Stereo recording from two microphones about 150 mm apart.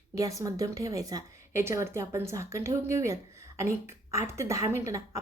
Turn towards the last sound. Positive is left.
turn(degrees=-20)  # may be behind; listen again after turning